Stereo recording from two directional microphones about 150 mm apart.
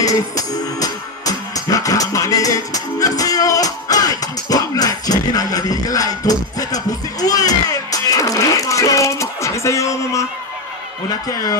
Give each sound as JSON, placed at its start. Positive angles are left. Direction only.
{"t": 0.0, "sound": "music", "side_deg": 25}